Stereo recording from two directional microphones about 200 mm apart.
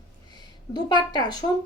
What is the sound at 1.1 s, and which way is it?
Speech, 20° left (ahead or behind).